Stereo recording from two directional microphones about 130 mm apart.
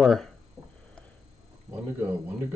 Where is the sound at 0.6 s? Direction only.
5° right (ahead or behind).